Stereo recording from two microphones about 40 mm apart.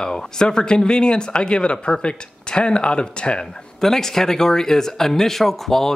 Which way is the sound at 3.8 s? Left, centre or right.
Centre.